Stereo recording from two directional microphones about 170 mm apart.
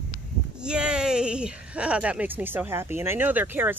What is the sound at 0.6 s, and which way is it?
Speech, 5° right (ahead or behind).